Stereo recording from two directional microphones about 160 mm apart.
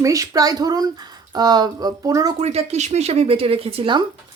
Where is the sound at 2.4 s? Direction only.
40° right (ahead or behind).